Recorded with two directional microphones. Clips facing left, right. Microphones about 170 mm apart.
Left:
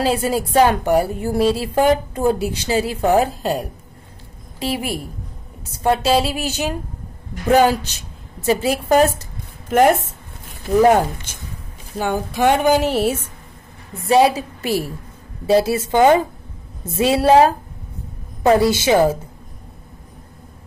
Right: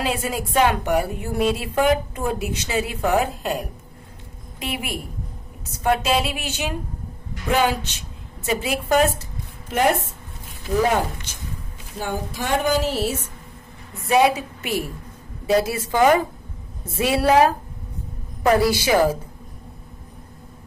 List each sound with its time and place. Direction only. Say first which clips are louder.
0.0 s a woman's voice: left 6 dB; 35° left (ahead or behind)
4.6 s a woman's voice: left 6 dB; 35° left (ahead or behind)
12.0 s a sound: left 9 dB; 65° left (ahead or behind)
14.0 s a woman's voice: left 3 dB; 30° left (ahead or behind)